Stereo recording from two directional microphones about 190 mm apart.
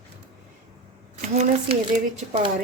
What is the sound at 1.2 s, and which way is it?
Speech, 35° right (ahead or behind).